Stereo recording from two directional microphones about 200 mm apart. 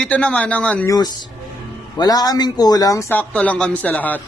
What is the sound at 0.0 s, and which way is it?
Speech, 5° left (ahead or behind).